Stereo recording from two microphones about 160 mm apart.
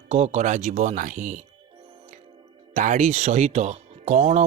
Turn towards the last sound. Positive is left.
turn(degrees=-45)  # may be behind; listen again after turning